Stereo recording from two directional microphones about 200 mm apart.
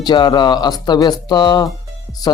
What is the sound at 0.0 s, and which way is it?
A man's voice, 20° left (ahead or behind).